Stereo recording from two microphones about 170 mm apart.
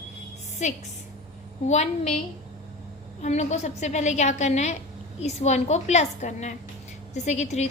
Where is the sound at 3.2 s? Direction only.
45° left (ahead or behind).